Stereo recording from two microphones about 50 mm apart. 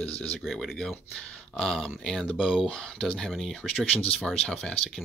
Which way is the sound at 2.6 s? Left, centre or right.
Centre.